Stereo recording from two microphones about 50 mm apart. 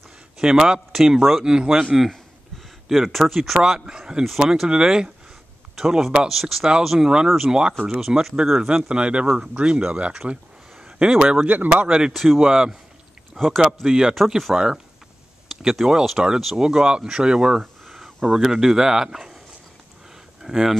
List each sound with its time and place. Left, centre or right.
0.4 s speech: centre
1.9 s speech: centre; by 10.1 s right
10.2 s a sound: centre
11.0 s speech: centre
11.4 s speech: right
11.7 s speech: right
12.1 s speech: centre
12.4 s speech: centre
17.6 s a sound: centre
18.3 s speech: centre
20.4 s speech: centre